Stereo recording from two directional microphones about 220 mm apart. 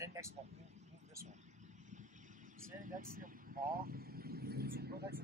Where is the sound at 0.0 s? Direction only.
15° right (ahead or behind).